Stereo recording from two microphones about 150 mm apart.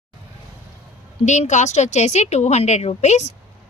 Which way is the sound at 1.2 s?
50° left (ahead or behind).